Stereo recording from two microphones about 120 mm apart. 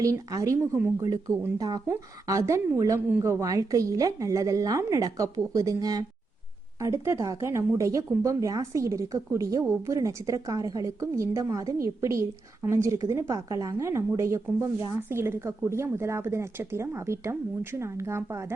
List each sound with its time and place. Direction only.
0.0 s a woman's voice: 25° right (ahead or behind)